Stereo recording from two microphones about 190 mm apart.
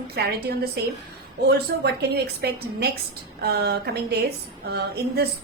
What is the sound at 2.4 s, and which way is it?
A woman's voice, 55° right (ahead or behind).